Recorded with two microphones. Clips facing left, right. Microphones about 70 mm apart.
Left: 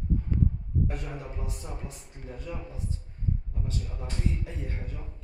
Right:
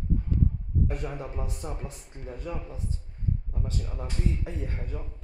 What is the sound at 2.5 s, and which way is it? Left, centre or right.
Speech, right.